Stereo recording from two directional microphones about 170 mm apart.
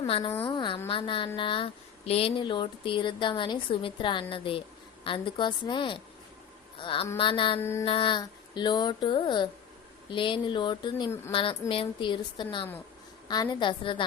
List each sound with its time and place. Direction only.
0.1 s music: 35° left (ahead or behind)
0.4 s speech: 30° left (ahead or behind)
0.9 s music: 30° left (ahead or behind)
1.4 s speech: 30° left (ahead or behind)
7.6 s a sound: 15° left (ahead or behind)
7.9 s speech: 30° left (ahead or behind)
11.3 s music: 30° left (ahead or behind)
11.7 s speech: 30° left (ahead or behind)